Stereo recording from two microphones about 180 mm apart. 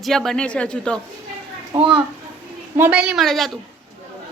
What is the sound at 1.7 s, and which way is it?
Speech, 30° right (ahead or behind).